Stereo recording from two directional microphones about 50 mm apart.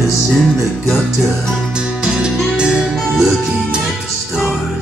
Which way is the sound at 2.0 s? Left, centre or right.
Centre.